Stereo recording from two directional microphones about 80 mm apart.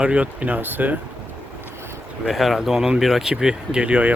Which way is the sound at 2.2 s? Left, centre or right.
Centre.